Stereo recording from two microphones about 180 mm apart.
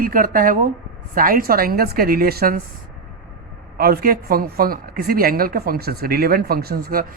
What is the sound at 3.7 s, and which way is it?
Speech, 55° right (ahead or behind).